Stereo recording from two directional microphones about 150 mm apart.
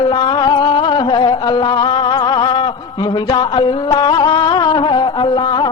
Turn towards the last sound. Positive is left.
turn(degrees=30)  # may be behind; listen again after turning